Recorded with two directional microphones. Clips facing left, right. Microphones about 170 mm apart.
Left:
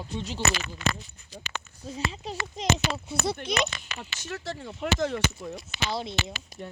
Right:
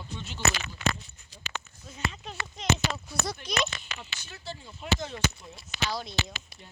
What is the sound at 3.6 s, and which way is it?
Speech, 75° left (ahead or behind).